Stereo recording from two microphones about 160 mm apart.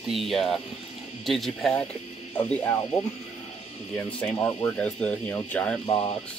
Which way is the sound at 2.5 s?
15° left (ahead or behind).